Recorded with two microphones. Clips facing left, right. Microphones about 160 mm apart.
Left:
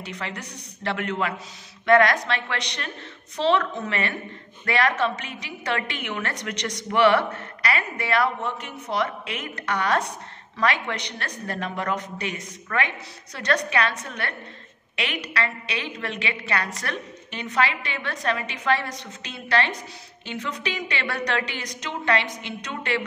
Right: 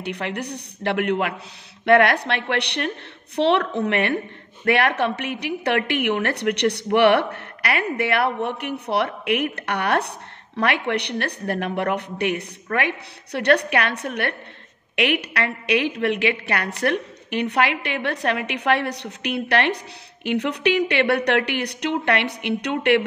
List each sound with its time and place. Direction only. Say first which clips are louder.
0.0 s a woman's voice: right 6 dB; 65° right (ahead or behind)